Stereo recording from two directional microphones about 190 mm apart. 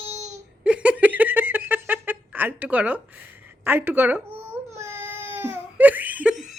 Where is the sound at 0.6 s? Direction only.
5° right (ahead or behind).